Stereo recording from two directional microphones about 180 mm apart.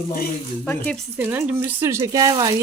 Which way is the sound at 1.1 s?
10° right (ahead or behind).